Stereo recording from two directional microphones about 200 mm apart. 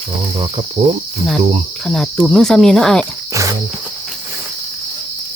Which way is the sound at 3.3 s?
15° right (ahead or behind).